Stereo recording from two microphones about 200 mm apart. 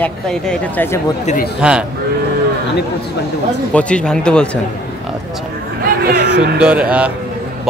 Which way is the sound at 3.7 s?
5° left (ahead or behind).